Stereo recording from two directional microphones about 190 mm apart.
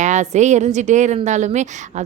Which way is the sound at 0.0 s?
40° right (ahead or behind).